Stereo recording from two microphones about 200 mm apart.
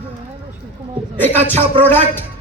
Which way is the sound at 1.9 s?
10° left (ahead or behind).